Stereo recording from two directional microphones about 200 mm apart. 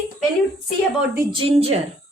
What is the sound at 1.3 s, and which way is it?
Speech, 25° right (ahead or behind).